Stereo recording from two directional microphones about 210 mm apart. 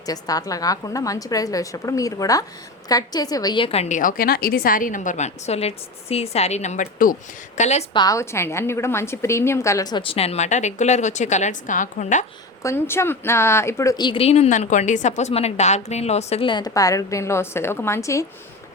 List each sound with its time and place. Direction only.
0.0 s a woman's voice: 15° left (ahead or behind); by 7.9 s 35° left (ahead or behind)
7.9 s a woman's voice: 15° left (ahead or behind); by 12.2 s 35° left (ahead or behind)
12.6 s speech: 10° left (ahead or behind)